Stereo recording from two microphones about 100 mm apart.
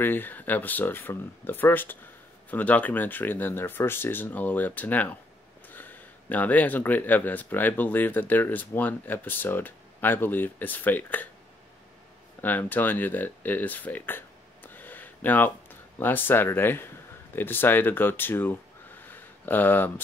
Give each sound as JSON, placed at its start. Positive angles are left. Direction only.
{"t": 0.0, "sound": "speech", "side_deg": 20}
{"t": 12.4, "sound": "speech", "side_deg": 20}
{"t": 19.0, "sound": "a sound", "side_deg": 20}